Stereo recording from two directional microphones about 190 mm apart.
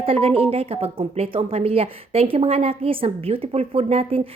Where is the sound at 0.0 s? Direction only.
30° right (ahead or behind).